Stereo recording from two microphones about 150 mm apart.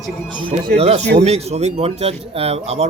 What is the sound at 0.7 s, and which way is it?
Speech, 45° right (ahead or behind).